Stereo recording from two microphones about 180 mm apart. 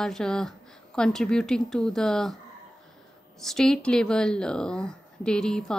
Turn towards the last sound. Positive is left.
turn(degrees=5)  # may be behind; listen again after turning